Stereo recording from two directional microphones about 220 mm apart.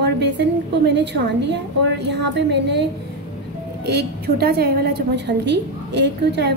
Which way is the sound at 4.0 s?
45° right (ahead or behind).